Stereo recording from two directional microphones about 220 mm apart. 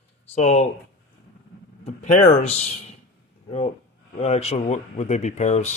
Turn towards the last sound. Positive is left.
turn(degrees=30)  # may be behind; listen again after turning